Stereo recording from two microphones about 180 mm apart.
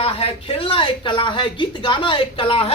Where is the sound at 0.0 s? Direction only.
30° left (ahead or behind).